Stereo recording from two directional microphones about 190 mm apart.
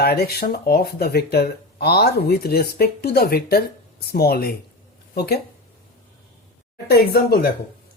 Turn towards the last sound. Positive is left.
turn(degrees=55)  # may be behind; listen again after turning